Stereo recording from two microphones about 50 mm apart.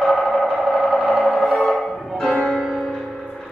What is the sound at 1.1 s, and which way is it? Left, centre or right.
Music, centre.